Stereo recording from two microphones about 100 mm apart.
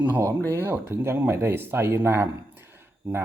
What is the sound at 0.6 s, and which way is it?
Speech, 25° right (ahead or behind).